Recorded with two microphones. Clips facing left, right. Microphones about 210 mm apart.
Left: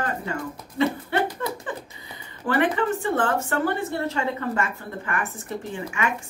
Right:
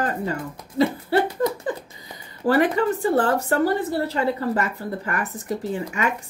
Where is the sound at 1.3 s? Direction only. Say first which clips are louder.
Right 6 dB; 35° right (ahead or behind).